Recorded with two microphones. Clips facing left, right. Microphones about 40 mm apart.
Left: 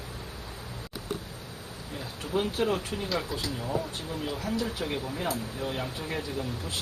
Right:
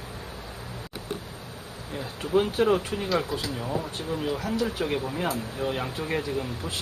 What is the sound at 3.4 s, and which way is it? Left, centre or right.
Speech, centre.